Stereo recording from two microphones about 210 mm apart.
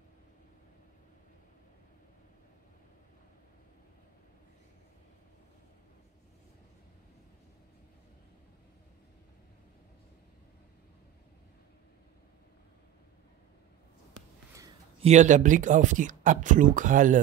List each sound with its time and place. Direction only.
15.0 s speech: 35° right (ahead or behind)